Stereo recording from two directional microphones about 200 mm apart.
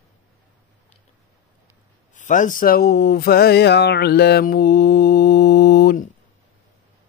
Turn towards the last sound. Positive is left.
turn(degrees=55)  # may be behind; listen again after turning